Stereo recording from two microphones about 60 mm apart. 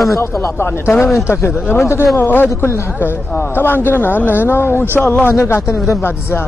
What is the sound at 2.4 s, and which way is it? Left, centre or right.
Speech, left.